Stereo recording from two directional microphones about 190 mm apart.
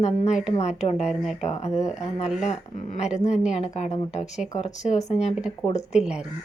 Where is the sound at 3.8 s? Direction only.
35° left (ahead or behind).